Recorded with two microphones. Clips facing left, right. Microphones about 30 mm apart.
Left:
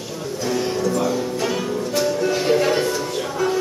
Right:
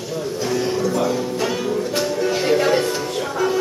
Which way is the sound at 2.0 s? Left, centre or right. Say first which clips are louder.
Left 2 dB; centre.